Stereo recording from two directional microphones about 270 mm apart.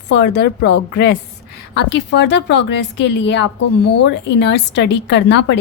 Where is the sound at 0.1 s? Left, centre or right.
Left.